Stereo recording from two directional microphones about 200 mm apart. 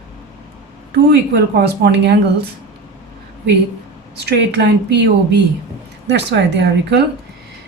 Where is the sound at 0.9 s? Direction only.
55° right (ahead or behind).